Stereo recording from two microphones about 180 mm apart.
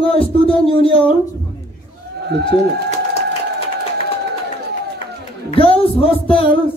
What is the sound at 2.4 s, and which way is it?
Speech, 30° left (ahead or behind).